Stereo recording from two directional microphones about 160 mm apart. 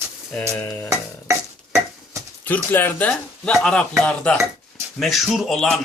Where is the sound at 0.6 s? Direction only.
10° left (ahead or behind).